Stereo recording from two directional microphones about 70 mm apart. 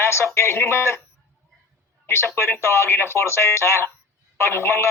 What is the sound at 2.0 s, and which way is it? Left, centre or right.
Speech, left.